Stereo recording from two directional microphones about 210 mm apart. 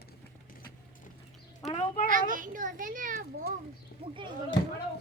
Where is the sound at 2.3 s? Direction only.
40° right (ahead or behind).